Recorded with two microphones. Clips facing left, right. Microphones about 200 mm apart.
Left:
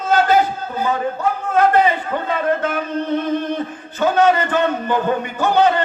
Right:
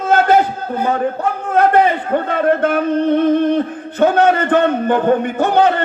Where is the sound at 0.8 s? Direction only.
55° right (ahead or behind).